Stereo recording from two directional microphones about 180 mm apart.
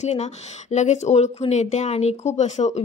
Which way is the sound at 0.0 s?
40° left (ahead or behind).